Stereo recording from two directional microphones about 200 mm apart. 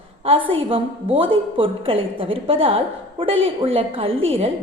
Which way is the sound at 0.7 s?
25° right (ahead or behind).